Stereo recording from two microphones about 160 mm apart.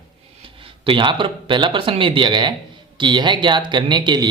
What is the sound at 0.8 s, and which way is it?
Speech, 30° right (ahead or behind).